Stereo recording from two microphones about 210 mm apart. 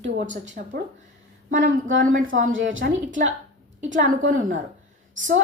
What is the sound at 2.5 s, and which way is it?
Speech, 65° right (ahead or behind).